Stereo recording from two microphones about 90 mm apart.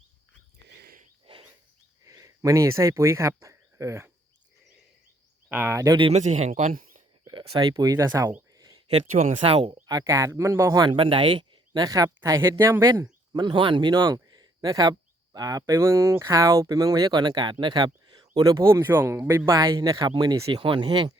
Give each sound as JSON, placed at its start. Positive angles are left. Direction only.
{"t": 2.0, "sound": "speech", "side_deg": -35}
{"t": 5.5, "sound": "speech", "side_deg": -20}
{"t": 5.7, "sound": "speech", "side_deg": -35}
{"t": 7.3, "sound": "speech", "side_deg": -55}
{"t": 8.5, "sound": "a sound", "side_deg": -45}
{"t": 9.4, "sound": "speech", "side_deg": -75}
{"t": 9.8, "sound": "speech", "side_deg": -45}
{"t": 10.8, "sound": "speech", "side_deg": -70}
{"t": 13.3, "sound": "speech", "side_deg": -55}
{"t": 18.6, "sound": "speech", "side_deg": -25}
{"t": 19.5, "sound": "speech", "side_deg": -40}
{"t": 20.7, "sound": "speech", "side_deg": -65}